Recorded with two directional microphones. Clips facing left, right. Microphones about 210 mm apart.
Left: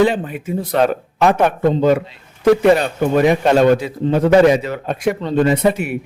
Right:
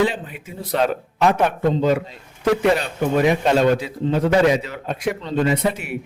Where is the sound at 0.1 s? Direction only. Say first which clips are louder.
Left 10 dB; 50° left (ahead or behind).